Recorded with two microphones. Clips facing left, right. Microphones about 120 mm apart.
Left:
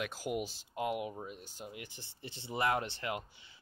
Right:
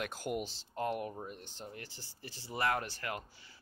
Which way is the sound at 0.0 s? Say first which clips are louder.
Left 1 dB; 5° left (ahead or behind).